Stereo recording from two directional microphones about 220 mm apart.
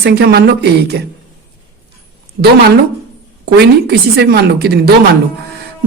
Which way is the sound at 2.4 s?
50° right (ahead or behind).